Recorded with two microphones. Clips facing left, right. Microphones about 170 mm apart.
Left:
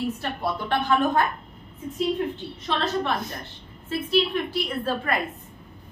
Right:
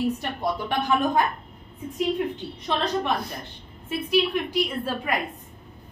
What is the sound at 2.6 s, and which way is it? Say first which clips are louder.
A woman's voice: even; 15° right (ahead or behind).